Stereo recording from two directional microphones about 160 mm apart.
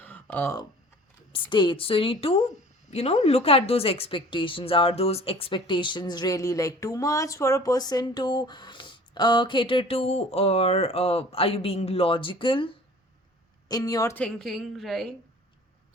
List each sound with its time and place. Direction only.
0.0 s a sound: 10° left (ahead or behind)
1.3 s speech: 30° left (ahead or behind)
14.2 s a woman's voice: 5° left (ahead or behind)